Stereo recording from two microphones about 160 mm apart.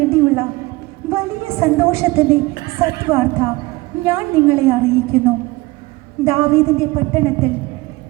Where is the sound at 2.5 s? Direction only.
80° left.